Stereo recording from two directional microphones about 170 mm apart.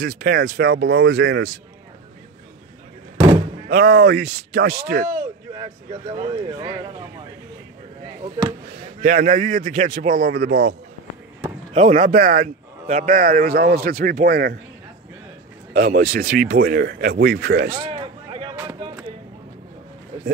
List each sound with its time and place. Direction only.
0.0 s speech: 65° right (ahead or behind)
3.6 s speech: 70° right (ahead or behind)
6.1 s speech: 25° right (ahead or behind)
9.0 s speech: 50° right (ahead or behind); by 10.8 s 70° right (ahead or behind)
11.7 s speech: 45° right (ahead or behind); by 14.6 s 65° right (ahead or behind)
15.7 s speech: 60° right (ahead or behind)
17.7 s a sound: 30° right (ahead or behind)